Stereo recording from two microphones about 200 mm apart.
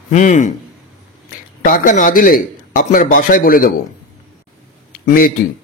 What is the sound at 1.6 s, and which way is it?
Speech, 45° left (ahead or behind).